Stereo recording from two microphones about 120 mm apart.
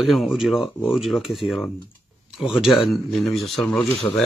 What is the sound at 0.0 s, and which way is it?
Speech, centre (ahead or behind).